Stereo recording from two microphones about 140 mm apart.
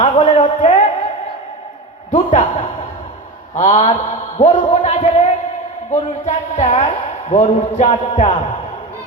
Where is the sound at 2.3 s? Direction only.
55° left (ahead or behind).